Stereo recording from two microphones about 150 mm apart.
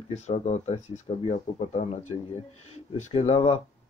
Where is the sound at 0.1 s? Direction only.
45° left (ahead or behind).